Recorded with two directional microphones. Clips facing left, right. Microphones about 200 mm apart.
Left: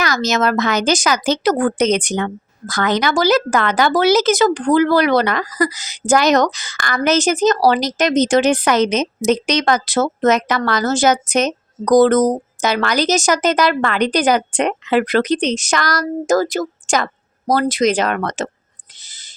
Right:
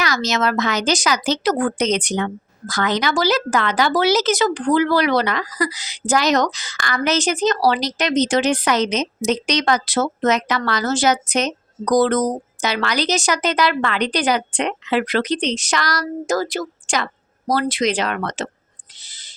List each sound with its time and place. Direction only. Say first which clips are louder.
0.0 s a woman's voice: left 3 dB; 45° left (ahead or behind)
18.9 s owl: even; 45° left (ahead or behind)